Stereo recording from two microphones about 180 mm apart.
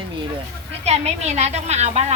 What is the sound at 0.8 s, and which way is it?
A woman's voice, 35° right (ahead or behind).